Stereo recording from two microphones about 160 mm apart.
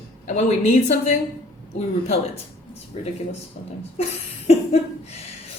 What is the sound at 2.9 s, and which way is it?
Speech, 45° left (ahead or behind).